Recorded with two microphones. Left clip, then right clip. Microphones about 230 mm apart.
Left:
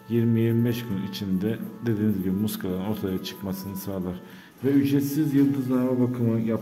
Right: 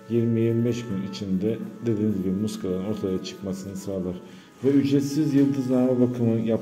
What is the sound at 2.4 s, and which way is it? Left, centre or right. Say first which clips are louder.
Speech: right 2 dB; left.